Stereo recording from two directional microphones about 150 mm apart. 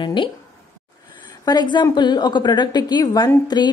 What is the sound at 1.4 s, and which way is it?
A woman's voice, 30° left (ahead or behind).